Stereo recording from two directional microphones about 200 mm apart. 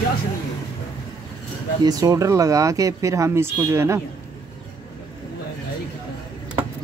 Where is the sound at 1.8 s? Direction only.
15° right (ahead or behind).